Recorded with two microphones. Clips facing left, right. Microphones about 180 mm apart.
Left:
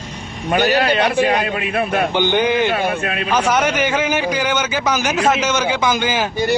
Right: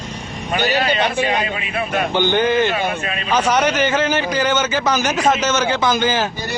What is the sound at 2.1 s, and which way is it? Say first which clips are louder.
Speech: right 2 dB; 15° left (ahead or behind).